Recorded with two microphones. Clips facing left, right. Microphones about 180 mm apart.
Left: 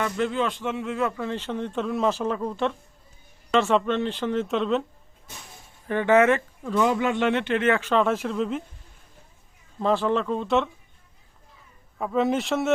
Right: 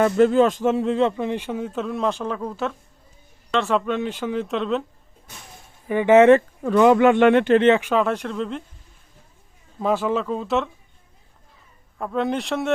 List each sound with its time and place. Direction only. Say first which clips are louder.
0.0 s a man's voice: right 9 dB; 45° right (ahead or behind); by 4.9 s centre (ahead or behind)
5.9 s a man's voice: right 5 dB; 15° right (ahead or behind)
6.6 s speech: right 8 dB; 70° right (ahead or behind)
7.5 s speech: right 7 dB; 30° right (ahead or behind)
7.8 s a man's voice: right 1 dB; 10° right (ahead or behind)
8.0 s speech: even; centre (ahead or behind)
9.8 s speech: right 1 dB; 5° right (ahead or behind)
11.9 s speech: left 1 dB; centre (ahead or behind)